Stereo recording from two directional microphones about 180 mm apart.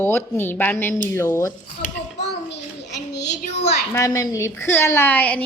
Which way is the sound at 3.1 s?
70° left (ahead or behind).